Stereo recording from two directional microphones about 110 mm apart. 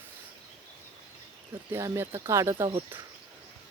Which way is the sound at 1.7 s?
25° right (ahead or behind).